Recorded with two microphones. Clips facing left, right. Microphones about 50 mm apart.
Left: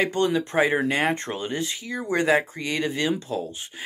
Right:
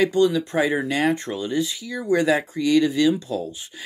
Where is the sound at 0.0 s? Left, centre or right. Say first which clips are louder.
Right 4 dB; left.